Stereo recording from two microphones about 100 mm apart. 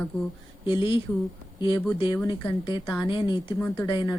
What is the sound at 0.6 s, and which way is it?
Speech, 60° left (ahead or behind).